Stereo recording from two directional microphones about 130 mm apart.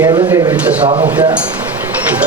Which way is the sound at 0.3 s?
25° right (ahead or behind).